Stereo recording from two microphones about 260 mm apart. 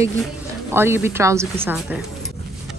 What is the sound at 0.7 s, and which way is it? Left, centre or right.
A woman's voice, centre.